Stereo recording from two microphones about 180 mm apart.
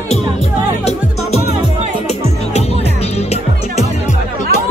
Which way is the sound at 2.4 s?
35° left (ahead or behind).